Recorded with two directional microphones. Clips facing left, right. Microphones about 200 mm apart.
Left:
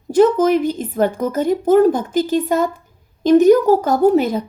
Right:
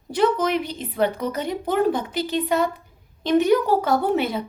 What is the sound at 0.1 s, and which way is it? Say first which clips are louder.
A woman's voice: left 8 dB; 45° left (ahead or behind).